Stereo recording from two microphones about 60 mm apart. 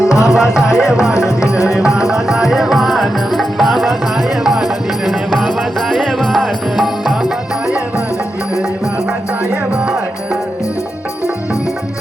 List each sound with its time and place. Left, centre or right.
0.0 s music: left
0.3 s music: centre
5.0 s music: centre